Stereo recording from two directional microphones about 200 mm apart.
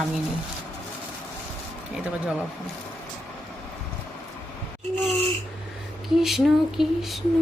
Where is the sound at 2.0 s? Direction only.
5° right (ahead or behind).